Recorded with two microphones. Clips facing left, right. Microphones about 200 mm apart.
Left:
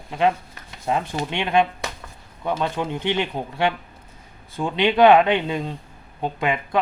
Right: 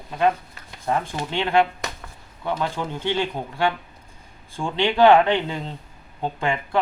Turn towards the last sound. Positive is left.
turn(degrees=15)  # may be behind; listen again after turning